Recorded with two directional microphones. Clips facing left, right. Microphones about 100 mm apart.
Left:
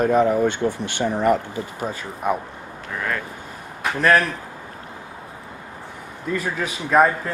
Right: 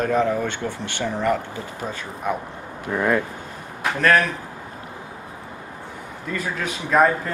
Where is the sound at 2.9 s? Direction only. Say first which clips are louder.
Right 6 dB; 20° right (ahead or behind).